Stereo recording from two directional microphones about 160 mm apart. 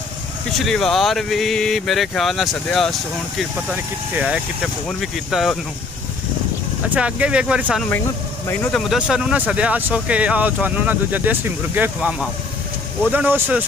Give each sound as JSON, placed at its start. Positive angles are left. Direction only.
{"t": 0.5, "sound": "speech", "side_deg": 0}
{"t": 6.9, "sound": "speech", "side_deg": -10}